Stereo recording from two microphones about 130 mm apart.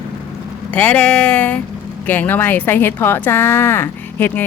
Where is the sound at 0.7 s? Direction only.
10° left (ahead or behind).